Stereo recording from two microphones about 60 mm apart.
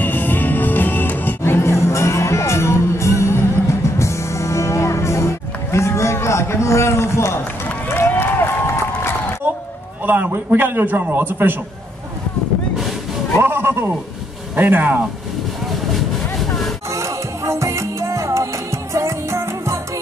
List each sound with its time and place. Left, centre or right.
0.0 s music: left
7.9 s run: left
10.0 s a man's voice: right
13.4 s speech: right
14.5 s a man's voice: right
15.9 s vehicle: centre
16.9 s music: right